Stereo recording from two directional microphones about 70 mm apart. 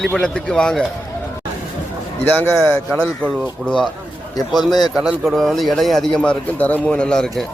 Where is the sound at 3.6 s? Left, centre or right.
Centre.